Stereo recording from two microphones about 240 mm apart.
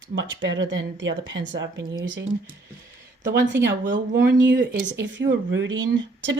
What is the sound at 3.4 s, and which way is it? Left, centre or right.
Speech, right.